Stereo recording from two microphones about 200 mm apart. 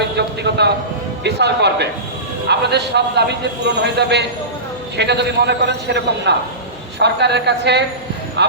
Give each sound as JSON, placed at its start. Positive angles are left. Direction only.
{"t": 0.2, "sound": "a man's voice", "side_deg": -55}